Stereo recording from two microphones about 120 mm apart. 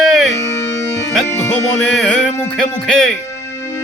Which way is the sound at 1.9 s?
5° left (ahead or behind).